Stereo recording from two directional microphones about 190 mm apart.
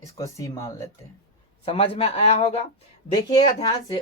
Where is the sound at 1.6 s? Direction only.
30° left (ahead or behind).